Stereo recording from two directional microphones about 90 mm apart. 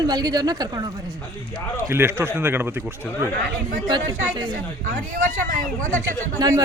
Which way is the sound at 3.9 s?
55° right (ahead or behind).